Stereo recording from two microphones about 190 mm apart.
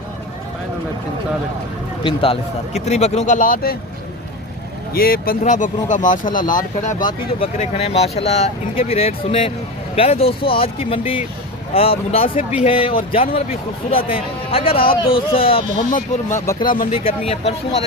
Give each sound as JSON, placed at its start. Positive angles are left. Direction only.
{"t": 2.0, "sound": "speech", "side_deg": 30}
{"t": 4.9, "sound": "speech", "side_deg": 50}
{"t": 7.0, "sound": "speech", "side_deg": 25}
{"t": 7.6, "sound": "speech", "side_deg": 35}
{"t": 15.9, "sound": "speech", "side_deg": 45}
{"t": 16.9, "sound": "speech", "side_deg": 30}